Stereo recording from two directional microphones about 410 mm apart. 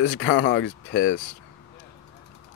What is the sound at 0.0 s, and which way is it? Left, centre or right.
Speech, left.